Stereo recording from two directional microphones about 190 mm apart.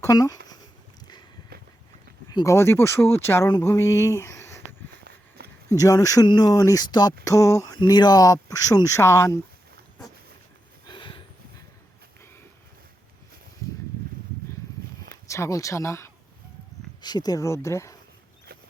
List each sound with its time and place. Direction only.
0.0 s speech: 20° left (ahead or behind)
0.4 s a sound: 20° left (ahead or behind)
2.3 s speech: 15° left (ahead or behind)
5.4 s a sound: 55° right (ahead or behind)
5.7 s speech: 20° left (ahead or behind)
10.8 s sniff: 25° left (ahead or behind)
15.3 s speech: 15° left (ahead or behind)